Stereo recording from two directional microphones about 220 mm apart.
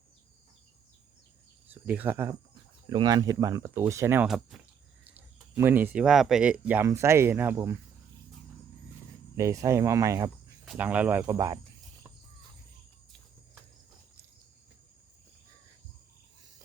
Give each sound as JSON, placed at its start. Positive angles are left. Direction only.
{"t": 1.6, "sound": "speech", "side_deg": -5}
{"t": 9.3, "sound": "speech", "side_deg": -15}